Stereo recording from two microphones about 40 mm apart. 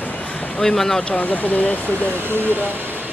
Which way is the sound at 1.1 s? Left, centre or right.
Left.